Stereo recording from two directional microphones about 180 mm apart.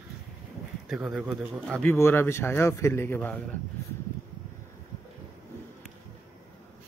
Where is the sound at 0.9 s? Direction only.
5° right (ahead or behind).